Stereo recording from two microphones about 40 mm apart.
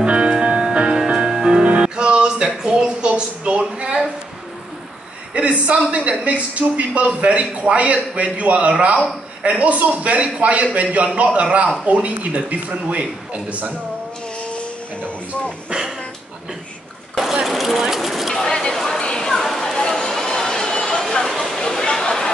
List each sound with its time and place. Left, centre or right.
0.0 s music: right
3.1 s a woman's voice: right
5.3 s a man's voice: right
14.5 s music: left
17.5 s a sound: centre
18.3 s a sound: centre
21.5 s chatter: left